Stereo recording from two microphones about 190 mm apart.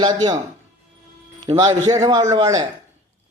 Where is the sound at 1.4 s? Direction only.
20° right (ahead or behind).